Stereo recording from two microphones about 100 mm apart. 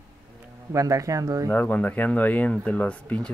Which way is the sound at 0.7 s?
35° right (ahead or behind).